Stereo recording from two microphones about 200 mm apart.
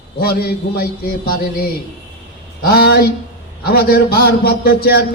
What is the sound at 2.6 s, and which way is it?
A man's voice, 50° left (ahead or behind).